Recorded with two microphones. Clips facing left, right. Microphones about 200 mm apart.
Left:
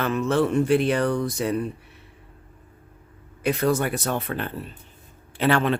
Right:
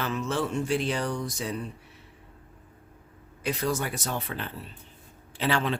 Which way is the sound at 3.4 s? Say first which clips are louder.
Left 7 dB; 60° left (ahead or behind).